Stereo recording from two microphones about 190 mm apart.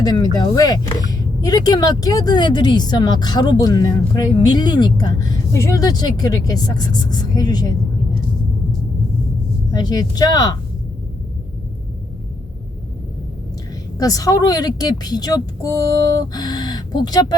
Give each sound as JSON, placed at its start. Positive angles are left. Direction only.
{"t": 0.0, "sound": "speech", "side_deg": 20}
{"t": 9.7, "sound": "speech", "side_deg": 20}
{"t": 14.0, "sound": "speech", "side_deg": 20}